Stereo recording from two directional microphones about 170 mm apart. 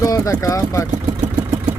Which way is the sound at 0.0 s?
20° left (ahead or behind).